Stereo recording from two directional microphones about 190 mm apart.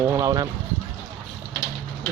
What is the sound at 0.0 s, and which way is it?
Speech, 15° right (ahead or behind).